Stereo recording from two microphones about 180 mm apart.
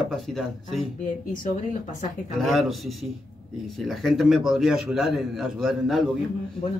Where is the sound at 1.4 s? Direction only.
45° left (ahead or behind).